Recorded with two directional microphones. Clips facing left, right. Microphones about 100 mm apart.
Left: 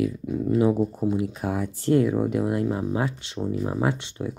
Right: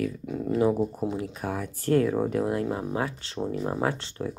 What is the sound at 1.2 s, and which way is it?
Speech, 25° left (ahead or behind).